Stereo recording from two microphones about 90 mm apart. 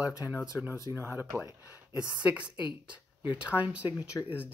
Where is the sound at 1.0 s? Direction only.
30° right (ahead or behind).